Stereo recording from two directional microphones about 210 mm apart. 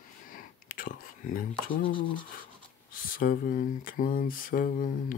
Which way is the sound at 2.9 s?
40° left (ahead or behind).